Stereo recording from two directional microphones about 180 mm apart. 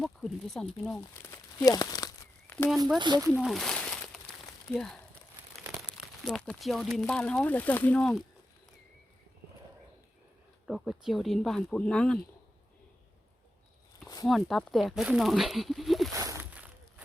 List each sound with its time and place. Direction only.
0.0 s speech: centre (ahead or behind); by 2.0 s 20° left (ahead or behind)
2.5 s a sound: 10° left (ahead or behind)
3.0 s speech: 20° right (ahead or behind)
3.4 s a sound: centre (ahead or behind)
4.7 s speech: 5° left (ahead or behind)
6.2 s speech: 5° left (ahead or behind)
10.7 s speech: centre (ahead or behind)
14.3 s speech: centre (ahead or behind)
16.1 s a sound: 15° right (ahead or behind)